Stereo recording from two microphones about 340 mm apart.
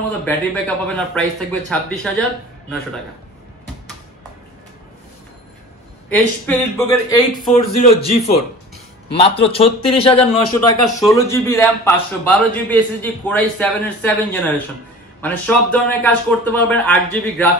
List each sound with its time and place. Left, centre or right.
0.2 s a man's voice: centre
6.0 s a man's voice: centre
7.5 s a man's voice: centre